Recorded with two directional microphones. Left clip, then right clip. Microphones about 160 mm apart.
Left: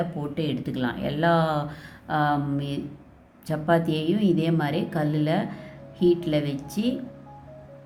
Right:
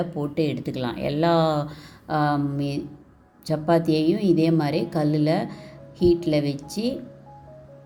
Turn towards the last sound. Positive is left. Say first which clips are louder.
# right 2 dB
turn(degrees=-20)  # may be behind; listen again after turning